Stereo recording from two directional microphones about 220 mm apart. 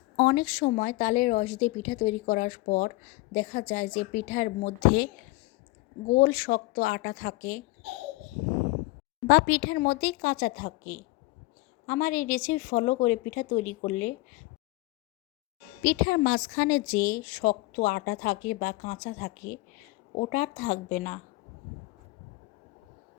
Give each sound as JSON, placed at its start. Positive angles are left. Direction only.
{"t": 0.2, "sound": "speech", "side_deg": 40}
{"t": 6.1, "sound": "speech", "side_deg": 40}
{"t": 9.2, "sound": "speech", "side_deg": 45}
{"t": 15.8, "sound": "speech", "side_deg": 45}